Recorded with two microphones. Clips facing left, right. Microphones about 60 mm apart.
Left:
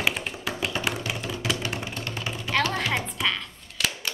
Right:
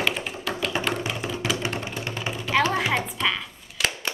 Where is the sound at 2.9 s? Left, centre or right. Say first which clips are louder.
Right 2 dB; centre.